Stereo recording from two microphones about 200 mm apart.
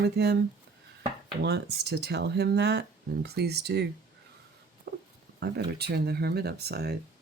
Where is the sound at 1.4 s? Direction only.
55° right (ahead or behind).